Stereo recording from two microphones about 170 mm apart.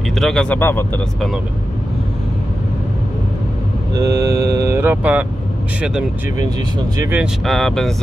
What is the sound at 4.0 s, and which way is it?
Mantra, 20° right (ahead or behind).